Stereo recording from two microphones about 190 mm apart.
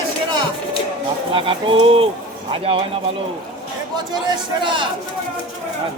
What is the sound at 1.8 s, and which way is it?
Speech, 30° right (ahead or behind).